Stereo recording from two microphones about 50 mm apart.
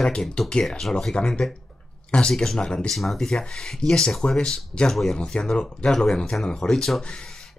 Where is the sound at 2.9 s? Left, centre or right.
Centre.